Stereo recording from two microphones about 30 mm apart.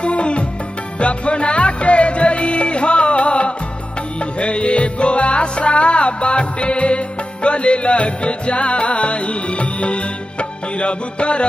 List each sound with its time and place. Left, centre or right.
0.0 s music: left